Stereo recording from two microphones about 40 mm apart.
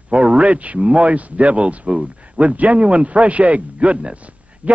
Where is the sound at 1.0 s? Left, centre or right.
Right.